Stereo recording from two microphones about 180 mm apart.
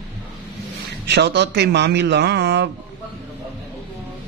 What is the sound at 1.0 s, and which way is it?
A man's voice, 70° right (ahead or behind).